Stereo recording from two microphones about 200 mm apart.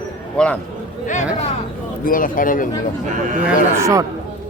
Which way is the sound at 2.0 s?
45° left (ahead or behind).